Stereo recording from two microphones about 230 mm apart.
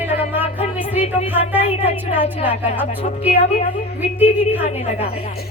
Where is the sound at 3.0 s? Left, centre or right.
Left.